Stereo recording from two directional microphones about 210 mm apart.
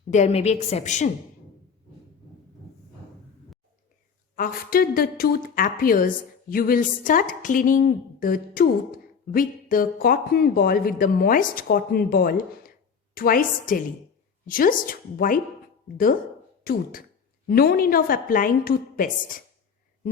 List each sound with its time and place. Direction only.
0.1 s a woman's voice: 30° left (ahead or behind)
4.4 s a woman's voice: 40° left (ahead or behind)
16.7 s a woman's voice: 45° left (ahead or behind)